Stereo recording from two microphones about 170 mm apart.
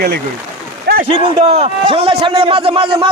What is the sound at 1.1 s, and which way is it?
A man's voice, 35° right (ahead or behind).